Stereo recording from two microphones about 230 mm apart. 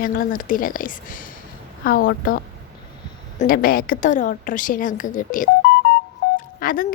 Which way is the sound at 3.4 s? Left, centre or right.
Left.